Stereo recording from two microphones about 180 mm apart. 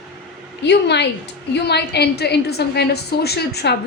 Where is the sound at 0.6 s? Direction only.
70° left (ahead or behind).